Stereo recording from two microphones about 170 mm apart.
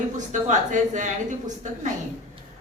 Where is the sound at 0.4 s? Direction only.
45° right (ahead or behind).